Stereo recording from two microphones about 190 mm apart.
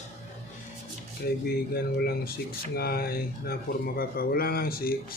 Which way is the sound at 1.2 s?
55° left (ahead or behind).